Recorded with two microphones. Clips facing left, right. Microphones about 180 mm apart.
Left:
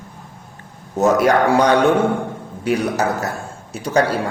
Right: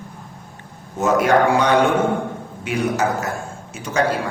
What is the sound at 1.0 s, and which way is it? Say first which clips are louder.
Mantra: left 1 dB; 35° left (ahead or behind).